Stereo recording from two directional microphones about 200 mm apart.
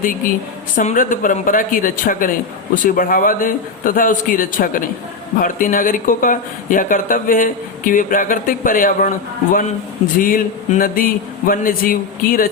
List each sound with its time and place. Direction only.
0.8 s speech: 40° left (ahead or behind)